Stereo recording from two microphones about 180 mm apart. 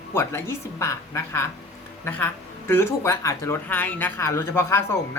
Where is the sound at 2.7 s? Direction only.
15° left (ahead or behind).